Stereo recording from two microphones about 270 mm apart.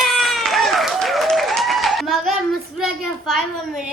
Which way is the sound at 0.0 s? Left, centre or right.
Centre.